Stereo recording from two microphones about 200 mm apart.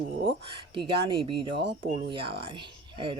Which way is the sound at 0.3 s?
25° right (ahead or behind).